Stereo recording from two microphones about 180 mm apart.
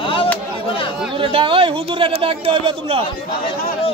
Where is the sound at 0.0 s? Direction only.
30° left (ahead or behind).